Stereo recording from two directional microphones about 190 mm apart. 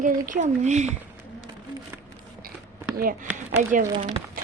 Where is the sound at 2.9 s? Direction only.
50° right (ahead or behind).